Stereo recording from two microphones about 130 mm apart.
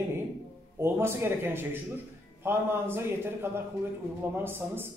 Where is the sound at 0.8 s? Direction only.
20° right (ahead or behind).